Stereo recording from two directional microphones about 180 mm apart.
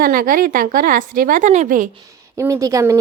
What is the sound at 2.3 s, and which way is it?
Speech, 20° right (ahead or behind).